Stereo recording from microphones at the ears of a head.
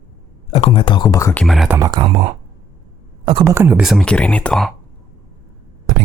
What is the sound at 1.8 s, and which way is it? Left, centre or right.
Speech, right.